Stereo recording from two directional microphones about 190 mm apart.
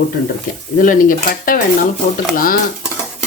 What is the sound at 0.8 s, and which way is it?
Speech, 45° left (ahead or behind).